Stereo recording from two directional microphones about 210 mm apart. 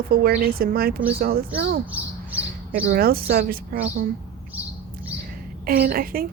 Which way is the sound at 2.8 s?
45° right (ahead or behind).